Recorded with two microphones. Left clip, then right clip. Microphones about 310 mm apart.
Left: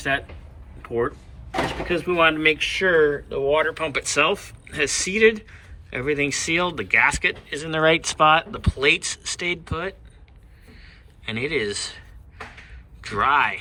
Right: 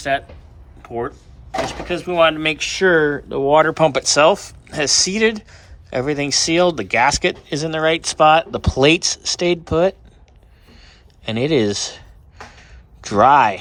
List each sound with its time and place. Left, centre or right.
0.0 s speech: centre
10.7 s a sound: centre
13.0 s speech: centre